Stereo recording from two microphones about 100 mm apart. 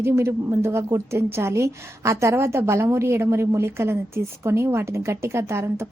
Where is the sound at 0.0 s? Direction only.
25° right (ahead or behind).